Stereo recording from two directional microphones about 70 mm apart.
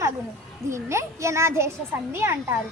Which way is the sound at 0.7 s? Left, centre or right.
Right.